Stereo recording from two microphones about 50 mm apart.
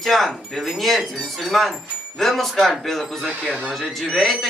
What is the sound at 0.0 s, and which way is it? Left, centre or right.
Speech, centre.